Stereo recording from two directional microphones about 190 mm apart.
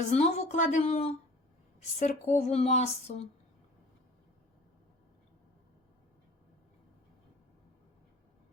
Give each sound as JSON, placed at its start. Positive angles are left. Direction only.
{"t": 0.1, "sound": "speech", "side_deg": 35}